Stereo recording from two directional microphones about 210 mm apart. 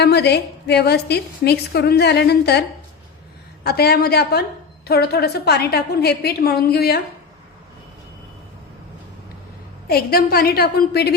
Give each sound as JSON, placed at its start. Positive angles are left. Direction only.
{"t": 0.0, "sound": "a woman's voice", "side_deg": 50}
{"t": 9.8, "sound": "a woman's voice", "side_deg": 45}